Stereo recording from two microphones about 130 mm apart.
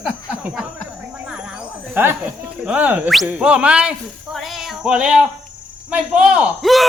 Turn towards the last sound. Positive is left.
turn(degrees=0)  # may be behind; listen again after turning